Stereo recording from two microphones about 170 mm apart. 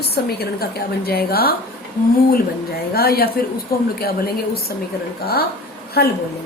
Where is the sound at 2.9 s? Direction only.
65° left (ahead or behind).